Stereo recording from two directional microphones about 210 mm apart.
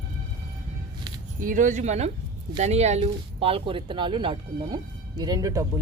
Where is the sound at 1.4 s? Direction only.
40° right (ahead or behind).